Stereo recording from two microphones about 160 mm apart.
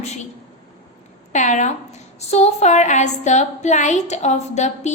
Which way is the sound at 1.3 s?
50° left (ahead or behind).